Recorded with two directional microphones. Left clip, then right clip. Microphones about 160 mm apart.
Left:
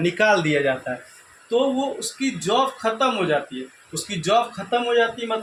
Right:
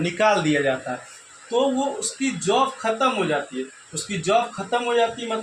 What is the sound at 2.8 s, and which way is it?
Speech, 40° left (ahead or behind).